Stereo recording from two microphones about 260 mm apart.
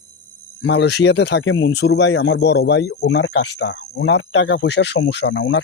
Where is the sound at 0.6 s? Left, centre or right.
Left.